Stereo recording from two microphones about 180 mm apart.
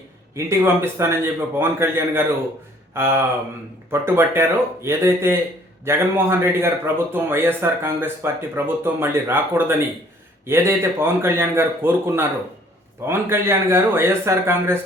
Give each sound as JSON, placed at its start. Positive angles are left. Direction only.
{"t": 0.3, "sound": "a man's voice", "side_deg": -15}